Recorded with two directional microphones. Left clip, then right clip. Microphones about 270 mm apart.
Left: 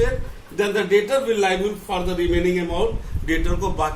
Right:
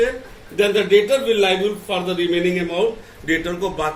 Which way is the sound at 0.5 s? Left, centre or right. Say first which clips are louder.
Right 4 dB; centre.